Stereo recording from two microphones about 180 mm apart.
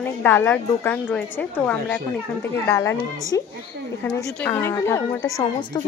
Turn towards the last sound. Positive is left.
turn(degrees=25)  # may be behind; listen again after turning